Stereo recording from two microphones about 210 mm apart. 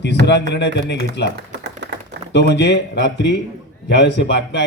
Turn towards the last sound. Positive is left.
turn(degrees=55)  # may be behind; listen again after turning